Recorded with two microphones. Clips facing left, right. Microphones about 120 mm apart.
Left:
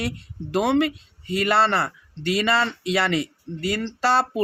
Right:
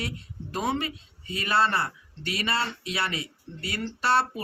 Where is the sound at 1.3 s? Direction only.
90° left.